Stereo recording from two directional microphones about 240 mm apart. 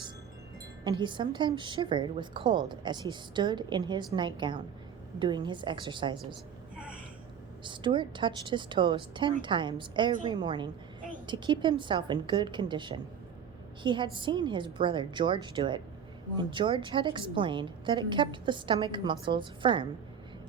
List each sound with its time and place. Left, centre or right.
0.9 s a woman's voice: centre
6.7 s gasp: centre
7.6 s a woman's voice: centre